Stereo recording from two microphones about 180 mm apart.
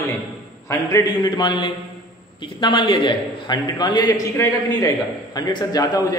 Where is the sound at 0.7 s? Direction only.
20° left (ahead or behind).